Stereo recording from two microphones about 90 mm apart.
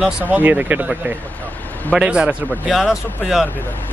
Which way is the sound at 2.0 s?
10° right (ahead or behind).